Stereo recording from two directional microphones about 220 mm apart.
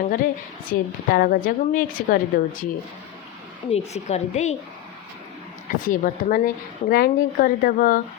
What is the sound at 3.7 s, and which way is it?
Speech, 30° left (ahead or behind).